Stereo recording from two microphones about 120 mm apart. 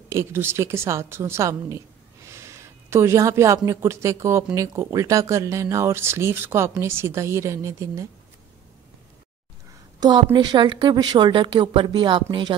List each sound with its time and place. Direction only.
0.1 s speech: 20° right (ahead or behind)
9.9 s a woman's voice: 40° right (ahead or behind)